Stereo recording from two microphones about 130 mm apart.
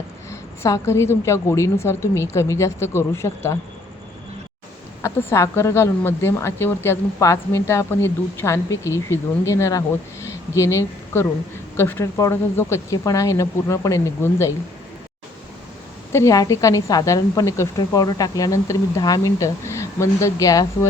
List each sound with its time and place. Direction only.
0.3 s speech: 20° left (ahead or behind)
5.0 s speech: 20° left (ahead or behind)
16.1 s speech: 25° left (ahead or behind)